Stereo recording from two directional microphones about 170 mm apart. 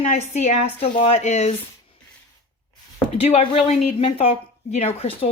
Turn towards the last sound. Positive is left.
turn(degrees=35)  # may be behind; listen again after turning